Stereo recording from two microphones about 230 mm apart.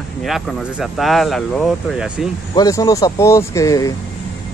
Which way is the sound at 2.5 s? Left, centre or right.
Centre.